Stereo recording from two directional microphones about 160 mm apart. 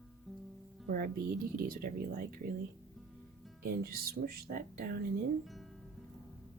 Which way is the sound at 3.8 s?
70° right (ahead or behind).